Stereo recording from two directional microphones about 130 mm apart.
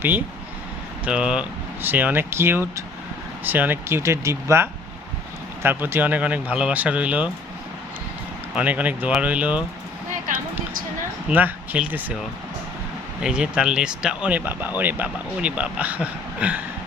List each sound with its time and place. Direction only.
1.0 s speech: 5° right (ahead or behind)
8.5 s speech: 10° right (ahead or behind)
11.3 s speech: 15° right (ahead or behind)
13.2 s speech: 5° right (ahead or behind)